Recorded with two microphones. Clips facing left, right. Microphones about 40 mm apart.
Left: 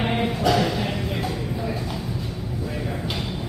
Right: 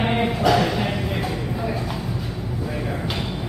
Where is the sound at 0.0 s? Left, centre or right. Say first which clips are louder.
Right 2 dB; centre.